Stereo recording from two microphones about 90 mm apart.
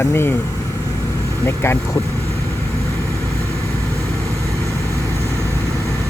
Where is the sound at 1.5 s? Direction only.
30° left (ahead or behind).